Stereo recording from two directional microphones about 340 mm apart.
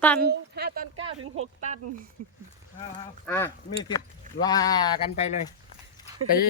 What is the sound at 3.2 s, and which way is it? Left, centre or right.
Speech, centre.